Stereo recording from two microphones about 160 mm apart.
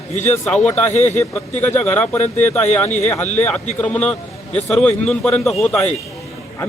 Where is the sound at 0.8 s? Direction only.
45° left (ahead or behind).